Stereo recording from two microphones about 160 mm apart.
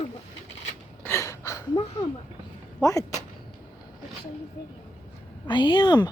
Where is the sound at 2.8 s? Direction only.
20° left (ahead or behind).